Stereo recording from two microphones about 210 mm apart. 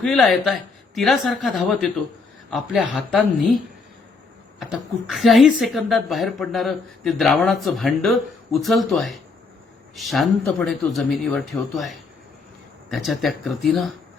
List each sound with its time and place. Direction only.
0.0 s speech: centre (ahead or behind)
4.6 s speech: centre (ahead or behind)